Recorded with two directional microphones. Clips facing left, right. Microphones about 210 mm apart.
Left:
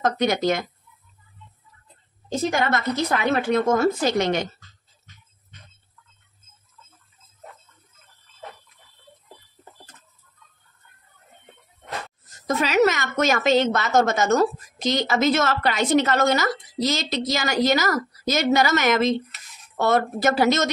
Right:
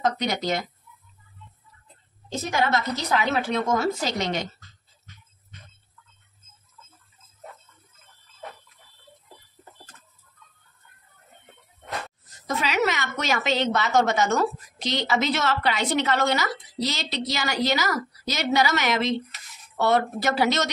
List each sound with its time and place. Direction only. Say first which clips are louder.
0.0 s a woman's voice: left 4 dB; 50° left (ahead or behind)
2.2 s a woman's voice: left 3 dB; 55° left (ahead or behind)
12.4 s a woman's voice: left 6 dB; 45° left (ahead or behind)